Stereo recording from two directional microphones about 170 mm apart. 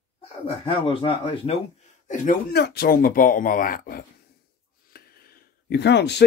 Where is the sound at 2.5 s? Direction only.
75° left (ahead or behind); by 4.0 s 55° left (ahead or behind).